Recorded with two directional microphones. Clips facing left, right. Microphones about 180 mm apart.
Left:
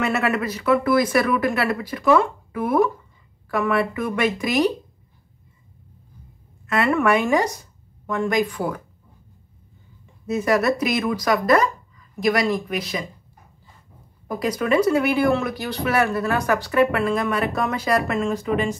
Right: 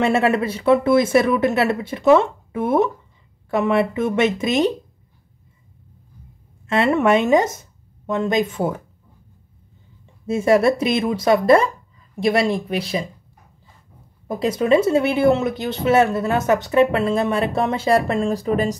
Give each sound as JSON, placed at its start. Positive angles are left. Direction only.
{"t": 0.0, "sound": "speech", "side_deg": -30}
{"t": 6.6, "sound": "speech", "side_deg": -25}
{"t": 10.2, "sound": "speech", "side_deg": -25}
{"t": 14.2, "sound": "speech", "side_deg": -25}